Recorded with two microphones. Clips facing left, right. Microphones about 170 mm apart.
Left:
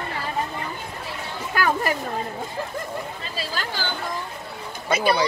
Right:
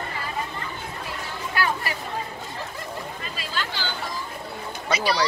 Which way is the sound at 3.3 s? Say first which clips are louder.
Left 3 dB; 45° left (ahead or behind).